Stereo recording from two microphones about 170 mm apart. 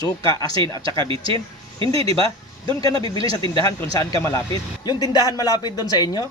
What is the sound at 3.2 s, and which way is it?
Speech, 30° right (ahead or behind).